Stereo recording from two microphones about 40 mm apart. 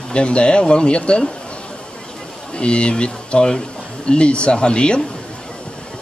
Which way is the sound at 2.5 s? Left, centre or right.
Left.